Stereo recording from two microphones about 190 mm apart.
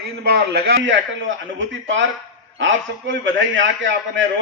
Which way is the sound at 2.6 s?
75° right (ahead or behind).